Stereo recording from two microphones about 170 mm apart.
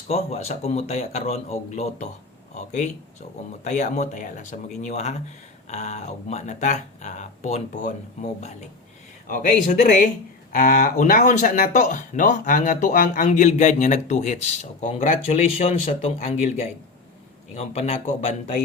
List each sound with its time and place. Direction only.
0.1 s speech: 40° left (ahead or behind)